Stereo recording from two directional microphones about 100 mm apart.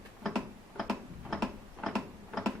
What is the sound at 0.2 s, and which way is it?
Tick-tock, 5° left (ahead or behind).